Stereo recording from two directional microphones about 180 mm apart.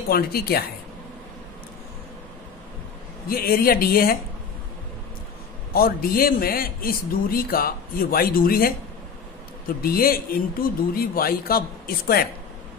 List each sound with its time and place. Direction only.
0.1 s a man's voice: 60° left (ahead or behind)
3.3 s a man's voice: 55° left (ahead or behind)
5.7 s a man's voice: 55° left (ahead or behind)
9.8 s a man's voice: 55° left (ahead or behind)